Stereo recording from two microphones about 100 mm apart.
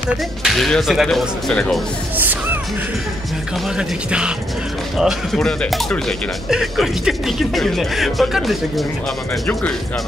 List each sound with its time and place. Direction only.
0.4 s speech: centre (ahead or behind)
2.1 s music: 20° right (ahead or behind)
3.7 s speech: 10° right (ahead or behind)
9.5 s speech: 10° left (ahead or behind)